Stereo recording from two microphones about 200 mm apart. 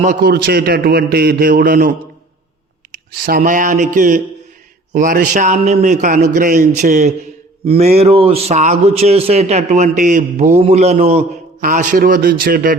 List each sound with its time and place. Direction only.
0.2 s a man's voice: 55° right (ahead or behind)
3.2 s a man's voice: 45° right (ahead or behind)